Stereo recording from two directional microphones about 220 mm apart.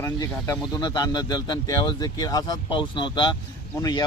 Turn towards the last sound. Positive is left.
turn(degrees=20)  # may be behind; listen again after turning